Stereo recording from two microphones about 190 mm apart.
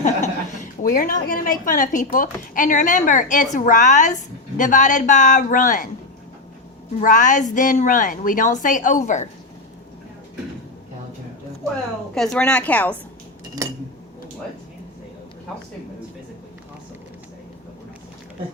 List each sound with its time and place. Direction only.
0.0 s chuckle: 40° left (ahead or behind)
1.3 s a woman's voice: 45° left (ahead or behind)
7.0 s a woman's voice: 40° left (ahead or behind)
12.1 s a woman's voice: centre (ahead or behind)